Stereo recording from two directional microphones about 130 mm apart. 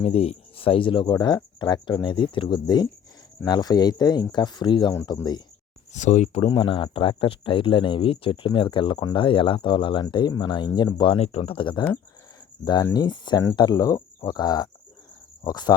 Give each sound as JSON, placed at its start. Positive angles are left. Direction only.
{"t": 0.0, "sound": "speech", "side_deg": 50}
{"t": 5.9, "sound": "speech", "side_deg": 65}
{"t": 6.4, "sound": "speech", "side_deg": 40}